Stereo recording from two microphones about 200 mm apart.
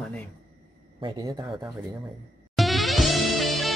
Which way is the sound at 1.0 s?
20° right (ahead or behind).